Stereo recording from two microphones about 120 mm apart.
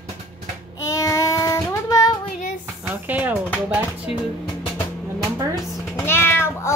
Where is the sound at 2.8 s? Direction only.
15° right (ahead or behind).